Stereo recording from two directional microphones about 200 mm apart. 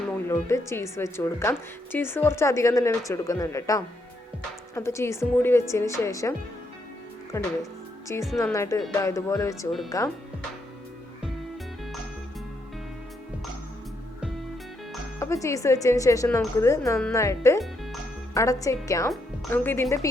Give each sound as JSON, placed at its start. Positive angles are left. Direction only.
{"t": 0.3, "sound": "a woman's voice", "side_deg": 15}
{"t": 7.3, "sound": "a woman's voice", "side_deg": 15}
{"t": 15.2, "sound": "a woman's voice", "side_deg": 15}